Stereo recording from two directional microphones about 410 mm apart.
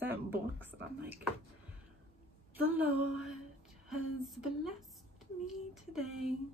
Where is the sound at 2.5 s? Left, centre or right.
Centre.